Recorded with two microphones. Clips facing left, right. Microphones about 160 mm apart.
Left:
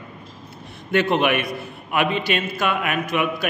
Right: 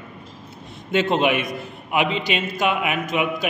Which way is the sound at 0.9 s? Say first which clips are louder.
Even; 20° right (ahead or behind).